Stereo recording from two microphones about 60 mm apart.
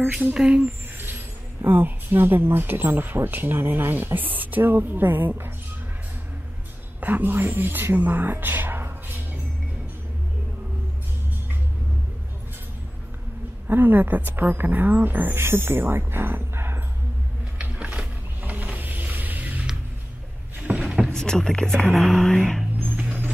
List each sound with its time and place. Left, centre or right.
0.1 s speech: centre
1.7 s speech: right
7.0 s speech: right
13.7 s speech: right
17.6 s vehicle: right
20.8 s rowboat: centre
21.1 s speech: centre
21.9 s whispering: centre
22.9 s vehicle: right